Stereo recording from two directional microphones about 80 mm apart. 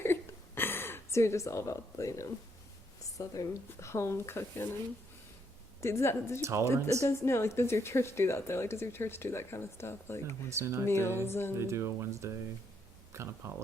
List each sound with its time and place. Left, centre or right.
0.0 s a sound: left
3.0 s a woman's voice: left
5.8 s a woman's voice: left
6.4 s speech: right
7.0 s a woman's voice: left
10.5 s speech: right
10.8 s a woman's voice: left
11.6 s speech: right
13.4 s speech: right